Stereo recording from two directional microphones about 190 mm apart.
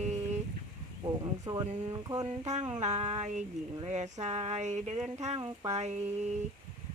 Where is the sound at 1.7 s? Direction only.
35° right (ahead or behind).